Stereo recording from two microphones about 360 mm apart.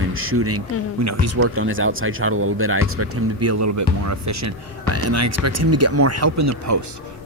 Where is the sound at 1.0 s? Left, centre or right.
Right.